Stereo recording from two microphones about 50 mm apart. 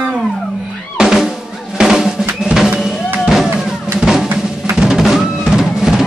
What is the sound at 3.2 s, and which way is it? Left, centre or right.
Music, centre.